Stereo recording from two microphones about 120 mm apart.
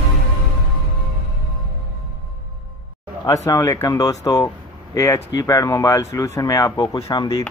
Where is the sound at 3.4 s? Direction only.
25° left (ahead or behind).